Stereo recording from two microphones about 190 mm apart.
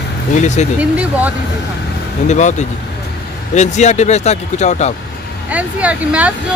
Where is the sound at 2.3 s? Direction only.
40° left (ahead or behind).